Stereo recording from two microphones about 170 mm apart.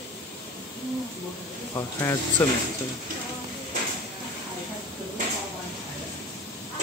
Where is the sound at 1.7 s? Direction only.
20° left (ahead or behind).